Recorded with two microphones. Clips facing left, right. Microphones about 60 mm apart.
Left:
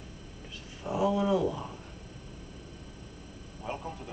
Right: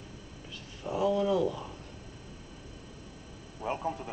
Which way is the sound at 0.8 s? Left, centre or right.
Centre.